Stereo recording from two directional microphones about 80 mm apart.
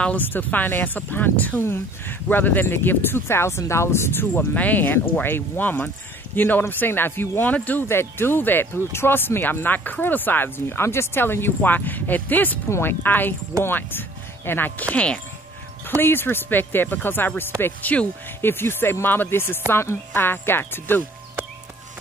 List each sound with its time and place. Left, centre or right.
0.0 s speech: left
4.3 s speech: centre
16.0 s speech: left